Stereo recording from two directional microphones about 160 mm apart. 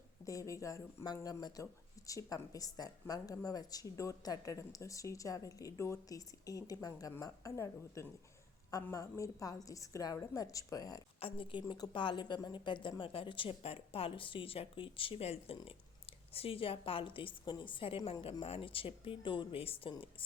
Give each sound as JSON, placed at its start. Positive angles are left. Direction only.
{"t": 0.3, "sound": "a woman's voice", "side_deg": 20}
{"t": 11.2, "sound": "a woman's voice", "side_deg": 35}